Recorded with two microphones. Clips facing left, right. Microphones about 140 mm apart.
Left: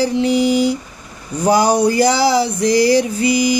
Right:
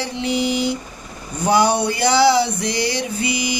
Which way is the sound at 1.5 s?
40° left (ahead or behind).